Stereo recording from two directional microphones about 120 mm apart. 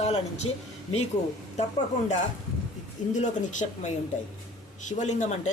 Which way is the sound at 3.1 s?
80° left.